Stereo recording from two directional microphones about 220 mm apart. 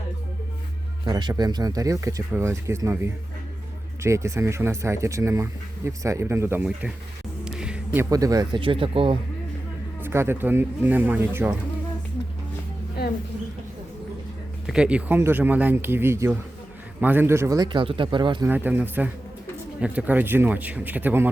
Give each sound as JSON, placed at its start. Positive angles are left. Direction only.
{"t": 1.0, "sound": "speech", "side_deg": -20}
{"t": 7.4, "sound": "music", "side_deg": -5}
{"t": 8.1, "sound": "speech", "side_deg": -15}
{"t": 10.0, "sound": "speech", "side_deg": -10}
{"t": 13.0, "sound": "a sound", "side_deg": 45}
{"t": 14.7, "sound": "speech", "side_deg": -5}
{"t": 18.4, "sound": "speech", "side_deg": -10}